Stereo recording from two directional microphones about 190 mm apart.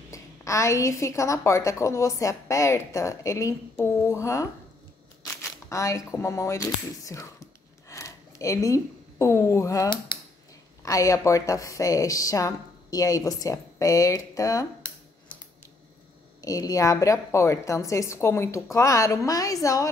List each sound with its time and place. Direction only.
0.1 s a woman's voice: 15° left (ahead or behind)
16.3 s a woman's voice: 20° left (ahead or behind)